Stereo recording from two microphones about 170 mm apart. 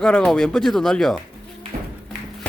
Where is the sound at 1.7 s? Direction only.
50° right (ahead or behind).